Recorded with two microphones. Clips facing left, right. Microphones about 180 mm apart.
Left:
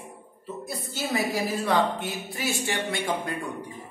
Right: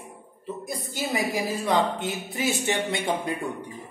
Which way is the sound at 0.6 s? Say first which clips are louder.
Even; 15° right (ahead or behind).